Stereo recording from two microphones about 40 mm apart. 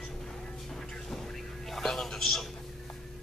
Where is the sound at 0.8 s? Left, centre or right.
Centre.